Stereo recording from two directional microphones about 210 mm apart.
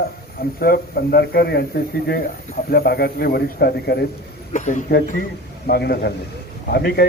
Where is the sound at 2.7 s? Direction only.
50° left (ahead or behind).